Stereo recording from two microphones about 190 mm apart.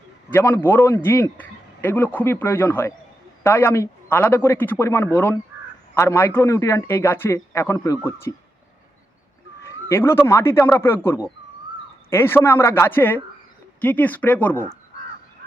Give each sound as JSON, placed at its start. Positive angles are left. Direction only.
{"t": 0.3, "sound": "a man's voice", "side_deg": 10}
{"t": 9.9, "sound": "a man's voice", "side_deg": 15}
{"t": 14.6, "sound": "crow", "side_deg": -45}